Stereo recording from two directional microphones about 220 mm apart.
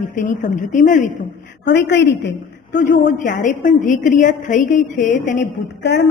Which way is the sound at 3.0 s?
35° left (ahead or behind).